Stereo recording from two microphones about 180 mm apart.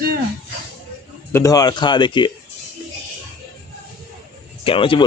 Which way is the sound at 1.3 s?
15° left (ahead or behind).